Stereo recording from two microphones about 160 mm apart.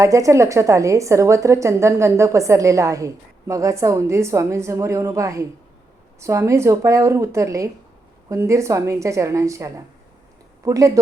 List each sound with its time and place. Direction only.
0.0 s a woman's voice: 20° right (ahead or behind)